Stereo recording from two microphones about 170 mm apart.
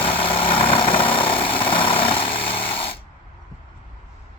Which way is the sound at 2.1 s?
30° left (ahead or behind).